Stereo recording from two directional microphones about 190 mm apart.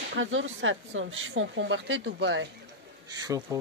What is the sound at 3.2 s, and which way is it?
Speech, 20° right (ahead or behind).